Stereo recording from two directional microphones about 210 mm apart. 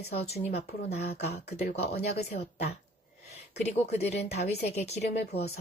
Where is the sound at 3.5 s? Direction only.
30° left (ahead or behind).